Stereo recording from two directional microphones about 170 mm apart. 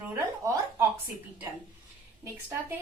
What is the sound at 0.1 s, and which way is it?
Speech, 15° right (ahead or behind).